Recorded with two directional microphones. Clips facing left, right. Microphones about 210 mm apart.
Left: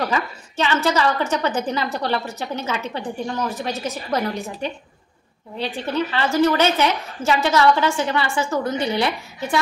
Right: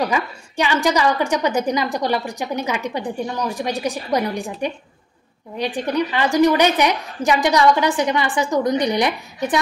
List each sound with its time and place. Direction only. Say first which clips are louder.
0.0 s a woman's voice: right 2 dB; 15° right (ahead or behind)